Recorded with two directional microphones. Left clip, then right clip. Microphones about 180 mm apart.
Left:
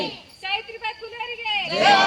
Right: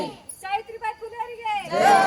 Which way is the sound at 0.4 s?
5° right (ahead or behind).